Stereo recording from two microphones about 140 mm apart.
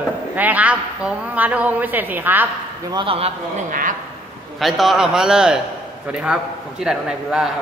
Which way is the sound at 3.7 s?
75° right (ahead or behind).